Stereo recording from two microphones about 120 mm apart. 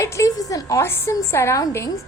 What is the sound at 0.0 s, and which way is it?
A woman's voice, 25° left (ahead or behind).